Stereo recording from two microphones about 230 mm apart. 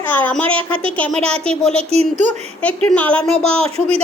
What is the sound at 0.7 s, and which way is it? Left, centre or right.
Speech, right.